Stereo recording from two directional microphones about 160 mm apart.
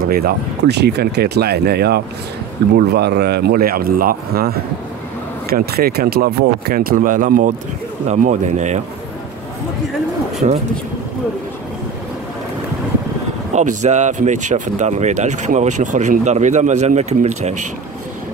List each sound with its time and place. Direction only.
0.0 s speech: 70° right (ahead or behind)
8.1 s speech: 50° right (ahead or behind)
10.4 s speech: 45° right (ahead or behind)
13.5 s speech: 45° right (ahead or behind)